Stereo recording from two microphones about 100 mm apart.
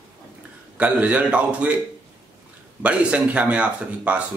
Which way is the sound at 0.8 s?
15° right (ahead or behind).